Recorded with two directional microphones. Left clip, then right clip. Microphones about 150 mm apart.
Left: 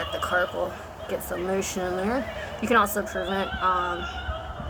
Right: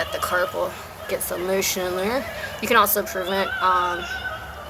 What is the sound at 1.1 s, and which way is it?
Speech, 30° left (ahead or behind).